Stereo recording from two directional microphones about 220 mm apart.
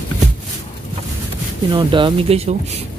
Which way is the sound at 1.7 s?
25° right (ahead or behind).